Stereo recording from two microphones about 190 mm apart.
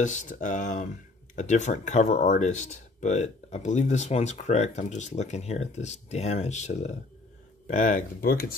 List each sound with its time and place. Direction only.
0.0 s speech: 40° left (ahead or behind)